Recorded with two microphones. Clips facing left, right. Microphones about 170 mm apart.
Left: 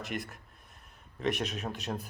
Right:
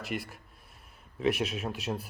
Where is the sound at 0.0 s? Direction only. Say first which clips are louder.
Right 1 dB; centre (ahead or behind).